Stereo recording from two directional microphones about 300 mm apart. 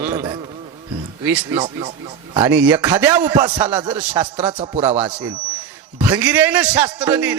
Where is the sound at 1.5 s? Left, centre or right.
Centre.